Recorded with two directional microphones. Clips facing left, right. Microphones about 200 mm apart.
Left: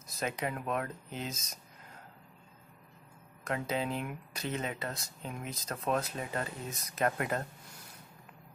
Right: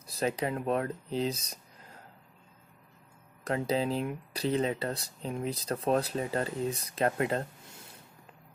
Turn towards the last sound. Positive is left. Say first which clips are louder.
# right 3 dB
turn(degrees=-30)  # may be behind; listen again after turning